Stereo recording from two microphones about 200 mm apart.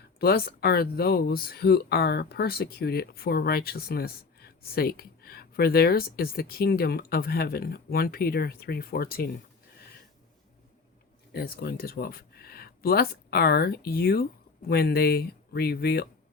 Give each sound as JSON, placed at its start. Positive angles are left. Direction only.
{"t": 0.2, "sound": "speech", "side_deg": 50}
{"t": 11.3, "sound": "speech", "side_deg": 50}